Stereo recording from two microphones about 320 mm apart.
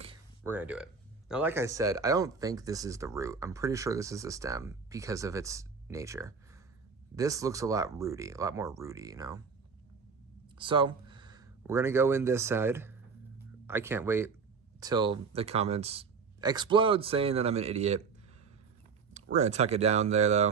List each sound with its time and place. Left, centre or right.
0.4 s speech: centre
10.6 s speech: centre
19.1 s speech: right